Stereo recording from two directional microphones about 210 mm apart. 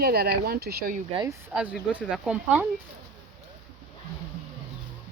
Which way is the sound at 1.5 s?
5° right (ahead or behind).